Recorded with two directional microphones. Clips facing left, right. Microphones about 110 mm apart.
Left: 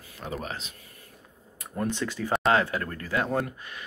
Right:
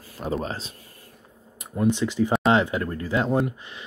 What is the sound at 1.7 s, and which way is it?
Speech, 15° right (ahead or behind).